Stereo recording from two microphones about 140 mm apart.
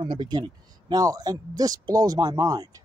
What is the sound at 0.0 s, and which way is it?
Speech, 35° right (ahead or behind).